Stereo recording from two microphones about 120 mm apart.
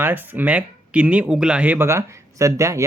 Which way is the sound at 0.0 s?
15° right (ahead or behind).